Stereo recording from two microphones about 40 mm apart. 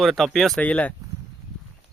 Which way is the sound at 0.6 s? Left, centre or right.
Left.